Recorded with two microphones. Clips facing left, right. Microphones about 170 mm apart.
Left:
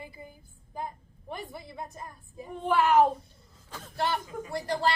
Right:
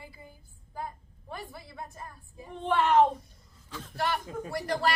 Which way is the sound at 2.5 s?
5° left (ahead or behind).